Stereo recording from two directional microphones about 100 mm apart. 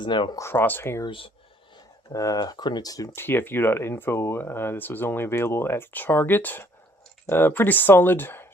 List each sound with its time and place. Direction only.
0.0 s speech: 50° left (ahead or behind)
0.3 s speech: 25° left (ahead or behind)
1.0 s speech: 60° left (ahead or behind)
1.7 s speech: 40° left (ahead or behind)
3.2 s speech: 20° left (ahead or behind)